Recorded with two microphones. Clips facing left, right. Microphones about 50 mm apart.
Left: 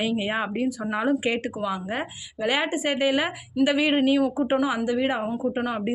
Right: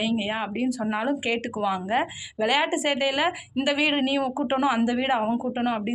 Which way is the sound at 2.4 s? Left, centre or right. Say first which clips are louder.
Right 1 dB; centre.